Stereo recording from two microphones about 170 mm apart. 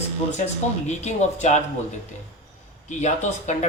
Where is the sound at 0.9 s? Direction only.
45° left (ahead or behind).